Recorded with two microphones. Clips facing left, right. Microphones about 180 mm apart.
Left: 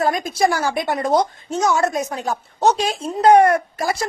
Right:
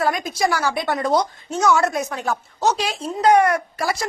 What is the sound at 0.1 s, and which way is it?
Speech, 50° left (ahead or behind).